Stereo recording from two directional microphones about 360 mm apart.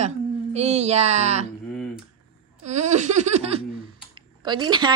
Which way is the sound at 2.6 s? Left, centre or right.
Centre.